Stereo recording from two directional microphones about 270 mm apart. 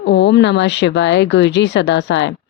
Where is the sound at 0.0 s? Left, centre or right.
Left.